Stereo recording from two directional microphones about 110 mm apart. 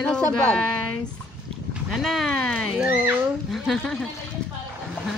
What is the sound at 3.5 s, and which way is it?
Speech, centre (ahead or behind).